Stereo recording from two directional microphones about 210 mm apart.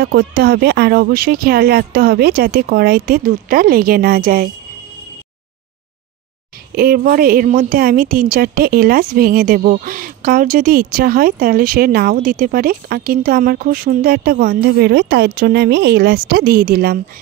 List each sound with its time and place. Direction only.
0.0 s a woman's voice: 50° right (ahead or behind)
6.7 s a woman's voice: 45° right (ahead or behind)